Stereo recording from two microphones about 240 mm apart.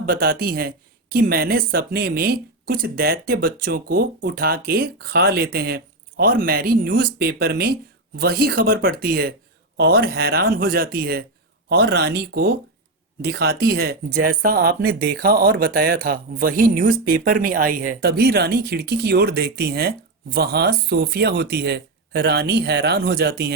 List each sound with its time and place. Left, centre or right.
0.0 s speech: right